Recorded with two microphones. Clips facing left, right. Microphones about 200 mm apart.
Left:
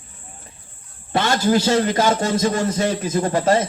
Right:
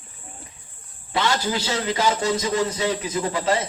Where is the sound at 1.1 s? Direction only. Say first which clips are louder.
Left 6 dB; 45° left (ahead or behind).